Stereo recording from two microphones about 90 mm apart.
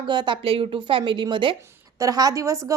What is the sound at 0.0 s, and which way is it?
Speech, 60° right (ahead or behind).